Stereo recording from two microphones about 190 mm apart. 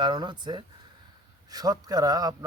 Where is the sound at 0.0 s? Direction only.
25° right (ahead or behind).